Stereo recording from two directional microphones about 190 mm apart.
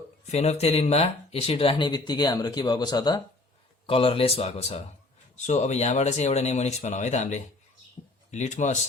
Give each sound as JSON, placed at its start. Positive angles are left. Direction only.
{"t": 0.3, "sound": "speech", "side_deg": 35}